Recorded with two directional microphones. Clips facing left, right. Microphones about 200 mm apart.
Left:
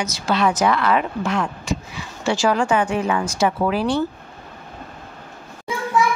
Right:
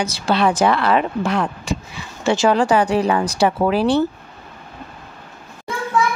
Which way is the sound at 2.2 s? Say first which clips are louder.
Right 3 dB; 25° right (ahead or behind).